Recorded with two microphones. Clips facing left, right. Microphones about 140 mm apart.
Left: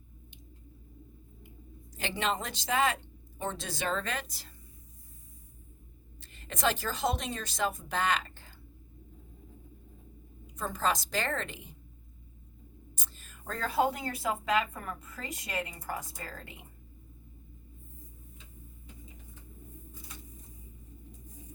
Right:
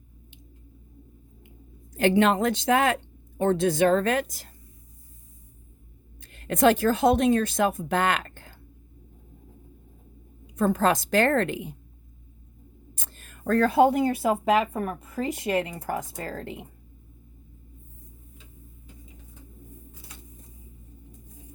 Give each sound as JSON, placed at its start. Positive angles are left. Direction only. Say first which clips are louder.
{"t": 1.9, "sound": "speech", "louder": "right 12 dB", "side_deg": -55}
{"t": 6.1, "sound": "a woman's voice", "louder": "right 14 dB", "side_deg": -55}
{"t": 10.6, "sound": "a woman's voice", "louder": "right 9 dB", "side_deg": -55}
{"t": 12.9, "sound": "speech", "louder": "right 4 dB", "side_deg": -55}